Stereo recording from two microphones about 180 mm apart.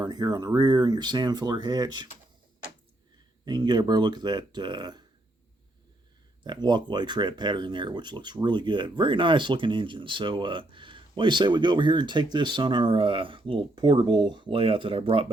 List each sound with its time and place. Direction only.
0.0 s speech: 20° right (ahead or behind)
3.4 s speech: 25° right (ahead or behind)
6.4 s speech: 25° right (ahead or behind)